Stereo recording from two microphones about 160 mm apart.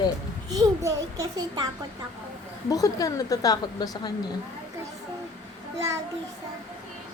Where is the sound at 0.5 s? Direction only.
20° right (ahead or behind).